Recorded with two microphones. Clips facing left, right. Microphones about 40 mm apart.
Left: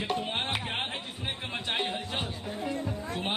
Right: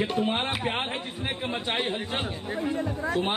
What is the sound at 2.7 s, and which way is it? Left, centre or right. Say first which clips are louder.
Speech: right 6 dB; right.